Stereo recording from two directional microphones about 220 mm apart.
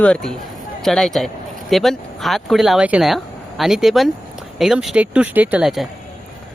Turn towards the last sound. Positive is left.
turn(degrees=-5)  # may be behind; listen again after turning